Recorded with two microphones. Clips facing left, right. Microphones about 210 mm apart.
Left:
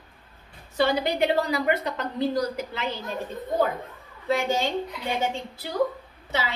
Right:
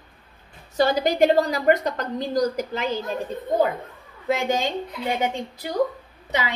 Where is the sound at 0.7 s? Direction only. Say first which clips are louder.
Right 3 dB; 40° right (ahead or behind).